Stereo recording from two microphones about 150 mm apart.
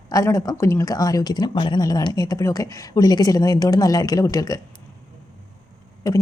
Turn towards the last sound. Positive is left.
turn(degrees=20)  # may be behind; listen again after turning